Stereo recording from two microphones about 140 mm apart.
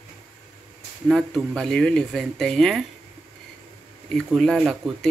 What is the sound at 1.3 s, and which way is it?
Speech, 5° left (ahead or behind).